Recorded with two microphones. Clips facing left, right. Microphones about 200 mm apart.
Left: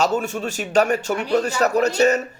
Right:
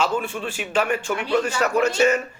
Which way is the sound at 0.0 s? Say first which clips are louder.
Left 3 dB; 45° left (ahead or behind).